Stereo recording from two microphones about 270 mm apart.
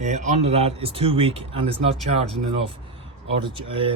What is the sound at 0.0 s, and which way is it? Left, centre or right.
Speech, right.